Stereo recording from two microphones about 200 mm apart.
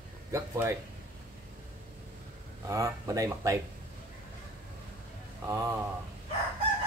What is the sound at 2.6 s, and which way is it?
Speech, 15° right (ahead or behind).